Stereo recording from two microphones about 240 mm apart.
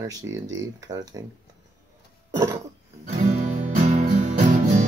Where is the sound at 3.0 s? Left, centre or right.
Right.